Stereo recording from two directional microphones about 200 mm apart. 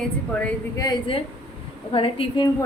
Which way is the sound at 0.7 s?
20° left (ahead or behind).